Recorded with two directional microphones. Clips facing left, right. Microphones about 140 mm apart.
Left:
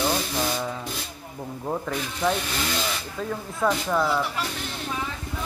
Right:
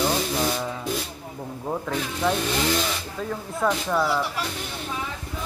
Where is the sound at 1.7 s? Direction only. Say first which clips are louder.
Right 1 dB; centre (ahead or behind).